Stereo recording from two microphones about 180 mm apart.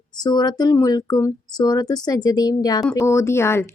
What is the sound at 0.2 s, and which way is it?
Speech, 20° left (ahead or behind).